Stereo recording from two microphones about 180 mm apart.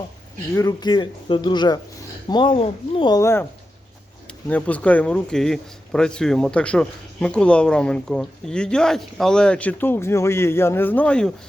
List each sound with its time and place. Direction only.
0.5 s speech: 20° left (ahead or behind)
3.2 s speech: 15° left (ahead or behind)